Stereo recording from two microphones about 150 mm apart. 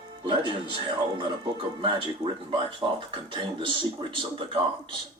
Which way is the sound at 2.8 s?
25° right (ahead or behind).